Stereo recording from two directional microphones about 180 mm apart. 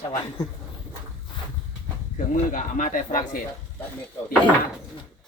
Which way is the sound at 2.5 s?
45° left (ahead or behind).